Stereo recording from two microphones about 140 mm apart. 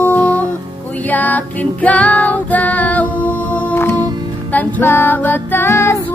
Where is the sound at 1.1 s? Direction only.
10° left (ahead or behind).